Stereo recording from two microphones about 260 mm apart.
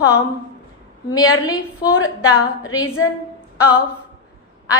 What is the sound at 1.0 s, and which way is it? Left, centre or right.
A woman's voice, centre.